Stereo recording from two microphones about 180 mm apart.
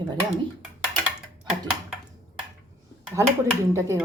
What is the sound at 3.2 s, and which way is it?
Speech, 15° right (ahead or behind).